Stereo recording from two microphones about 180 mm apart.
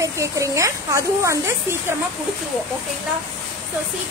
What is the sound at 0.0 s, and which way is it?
Speech, 15° right (ahead or behind).